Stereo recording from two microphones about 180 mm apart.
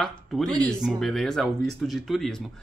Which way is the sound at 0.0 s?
Centre (ahead or behind).